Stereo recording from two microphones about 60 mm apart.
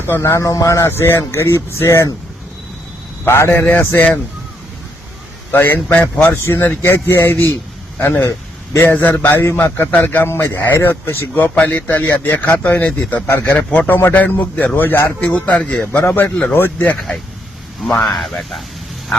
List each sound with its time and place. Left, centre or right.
0.2 s speech: left
0.9 s speech: left
3.2 s speech: left
3.6 s a man's voice: left
5.5 s a man's voice: left
8.7 s speech: left
9.0 s a man's voice: left
11.5 s a man's voice: left
13.5 s a man's voice: left
15.2 s speech: centre
16.0 s a man's voice: left
18.0 s speech: centre